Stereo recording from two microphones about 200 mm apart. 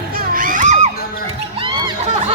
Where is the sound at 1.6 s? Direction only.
25° right (ahead or behind).